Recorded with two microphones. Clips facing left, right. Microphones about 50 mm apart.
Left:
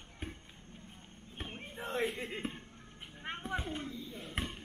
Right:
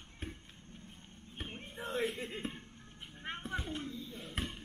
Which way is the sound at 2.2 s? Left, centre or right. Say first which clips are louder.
Left 1 dB; centre.